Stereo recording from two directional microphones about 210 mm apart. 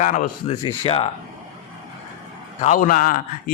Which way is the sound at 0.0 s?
35° left (ahead or behind).